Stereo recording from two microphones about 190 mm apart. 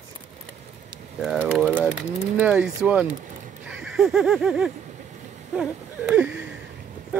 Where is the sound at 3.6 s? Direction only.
5° right (ahead or behind).